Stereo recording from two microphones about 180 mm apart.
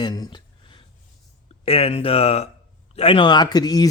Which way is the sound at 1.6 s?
35° left (ahead or behind).